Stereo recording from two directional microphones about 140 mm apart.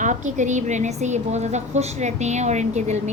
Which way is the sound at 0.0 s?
60° right (ahead or behind).